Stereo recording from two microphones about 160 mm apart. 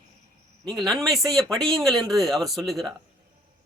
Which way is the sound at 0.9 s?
Centre (ahead or behind).